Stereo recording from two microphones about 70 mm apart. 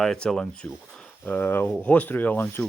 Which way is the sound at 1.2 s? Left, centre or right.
Left.